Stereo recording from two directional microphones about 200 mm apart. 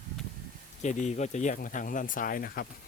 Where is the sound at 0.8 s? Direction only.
35° left (ahead or behind).